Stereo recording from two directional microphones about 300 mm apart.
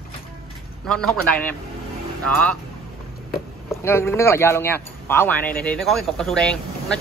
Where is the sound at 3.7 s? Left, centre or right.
Centre.